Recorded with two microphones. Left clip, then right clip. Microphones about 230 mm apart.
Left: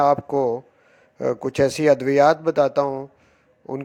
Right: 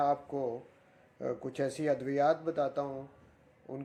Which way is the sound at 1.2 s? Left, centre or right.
Left.